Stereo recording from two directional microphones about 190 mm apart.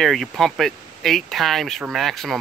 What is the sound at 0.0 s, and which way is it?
Speech, centre (ahead or behind).